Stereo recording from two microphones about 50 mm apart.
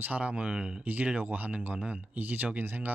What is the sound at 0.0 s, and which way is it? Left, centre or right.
Speech, right.